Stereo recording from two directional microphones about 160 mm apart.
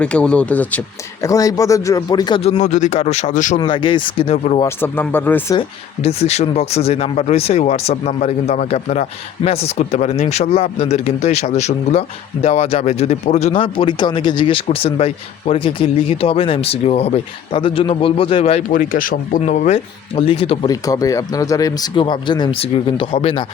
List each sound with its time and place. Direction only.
0.0 s speech: 5° left (ahead or behind); by 2.4 s 25° left (ahead or behind)
2.4 s speech: 45° left (ahead or behind)
3.6 s speech: 30° left (ahead or behind)
4.6 s speech: 15° left (ahead or behind)
5.5 s speech: 40° left (ahead or behind)
18.7 s speech: 60° left (ahead or behind); by 20.7 s 35° left (ahead or behind)
20.7 s speech: 20° left (ahead or behind)